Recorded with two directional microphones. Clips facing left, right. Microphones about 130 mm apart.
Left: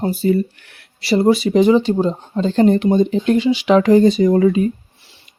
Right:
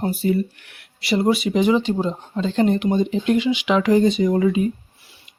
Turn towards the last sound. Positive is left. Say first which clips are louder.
# left 5 dB
turn(degrees=40)  # may be behind; listen again after turning